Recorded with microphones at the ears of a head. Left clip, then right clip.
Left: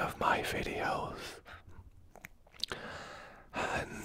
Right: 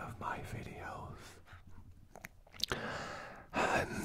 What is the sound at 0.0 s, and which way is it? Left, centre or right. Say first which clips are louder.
Whispering: left 11 dB; left.